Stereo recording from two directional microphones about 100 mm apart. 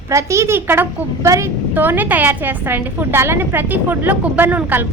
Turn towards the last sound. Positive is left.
turn(degrees=-15)  # may be behind; listen again after turning